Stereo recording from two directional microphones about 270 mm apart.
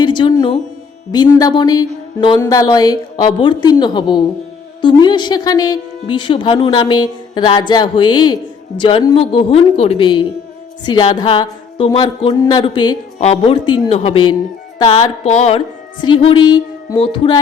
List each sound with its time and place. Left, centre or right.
0.0 s a woman's voice: centre